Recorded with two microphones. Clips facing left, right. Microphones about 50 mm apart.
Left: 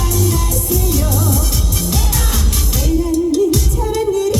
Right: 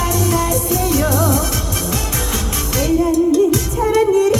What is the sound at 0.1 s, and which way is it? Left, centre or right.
Music, right.